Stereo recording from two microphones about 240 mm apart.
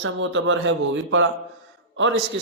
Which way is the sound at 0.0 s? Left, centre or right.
Right.